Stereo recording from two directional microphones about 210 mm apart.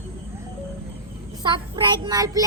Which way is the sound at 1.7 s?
20° right (ahead or behind).